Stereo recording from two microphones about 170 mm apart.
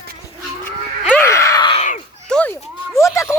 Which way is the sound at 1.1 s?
15° left (ahead or behind).